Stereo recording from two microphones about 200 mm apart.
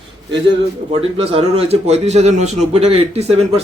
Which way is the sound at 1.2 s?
30° right (ahead or behind).